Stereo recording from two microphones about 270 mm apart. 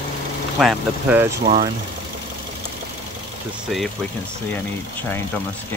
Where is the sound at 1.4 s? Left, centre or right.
Right.